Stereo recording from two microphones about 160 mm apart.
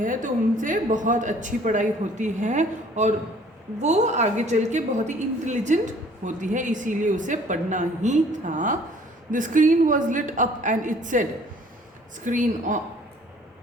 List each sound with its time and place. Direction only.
0.0 s a woman's voice: 55° right (ahead or behind)